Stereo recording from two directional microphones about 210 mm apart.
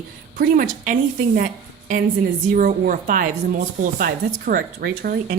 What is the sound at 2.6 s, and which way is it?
Speech, 40° right (ahead or behind).